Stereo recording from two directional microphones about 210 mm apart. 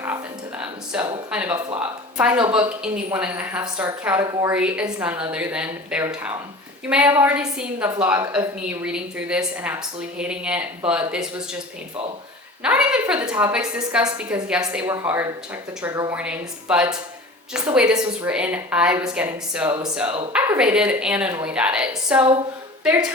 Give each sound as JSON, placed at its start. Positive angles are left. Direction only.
{"t": 0.9, "sound": "a woman's voice", "side_deg": -5}
{"t": 4.5, "sound": "speech", "side_deg": -5}
{"t": 12.6, "sound": "a woman's voice", "side_deg": -5}